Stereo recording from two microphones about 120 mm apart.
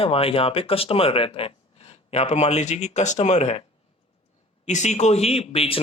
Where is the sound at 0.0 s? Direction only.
50° left (ahead or behind).